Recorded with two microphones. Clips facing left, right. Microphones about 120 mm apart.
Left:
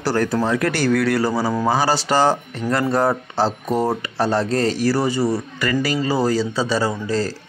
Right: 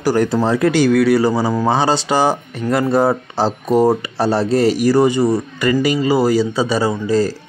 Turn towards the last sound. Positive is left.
turn(degrees=-15)  # may be behind; listen again after turning